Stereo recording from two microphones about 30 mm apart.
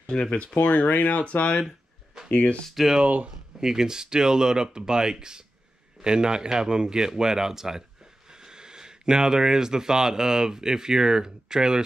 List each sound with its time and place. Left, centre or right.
0.1 s speech: left
0.6 s speech: left
2.7 s speech: centre
3.6 s speech: right